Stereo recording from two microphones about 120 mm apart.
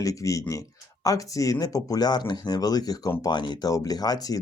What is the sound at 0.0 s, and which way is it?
Speech, 25° left (ahead or behind).